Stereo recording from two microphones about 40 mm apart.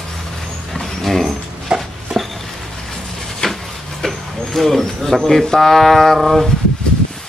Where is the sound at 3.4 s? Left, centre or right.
Centre.